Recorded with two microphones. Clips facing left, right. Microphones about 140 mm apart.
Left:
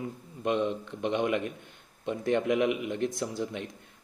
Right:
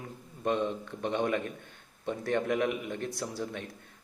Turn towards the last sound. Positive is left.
turn(degrees=20)  # may be behind; listen again after turning